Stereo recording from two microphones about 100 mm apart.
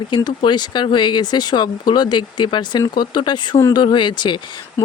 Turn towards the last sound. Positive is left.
turn(degrees=50)  # may be behind; listen again after turning